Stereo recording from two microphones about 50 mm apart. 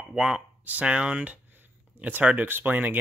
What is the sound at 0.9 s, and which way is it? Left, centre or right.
Speech, centre.